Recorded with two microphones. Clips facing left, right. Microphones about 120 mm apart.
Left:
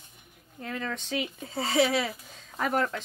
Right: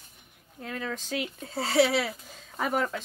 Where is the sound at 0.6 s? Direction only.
Centre (ahead or behind).